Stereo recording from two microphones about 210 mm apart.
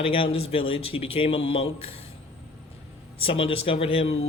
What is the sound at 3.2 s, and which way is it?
Speech, 25° left (ahead or behind).